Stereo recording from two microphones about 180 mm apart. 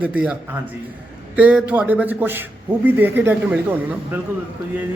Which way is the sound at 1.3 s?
5° right (ahead or behind).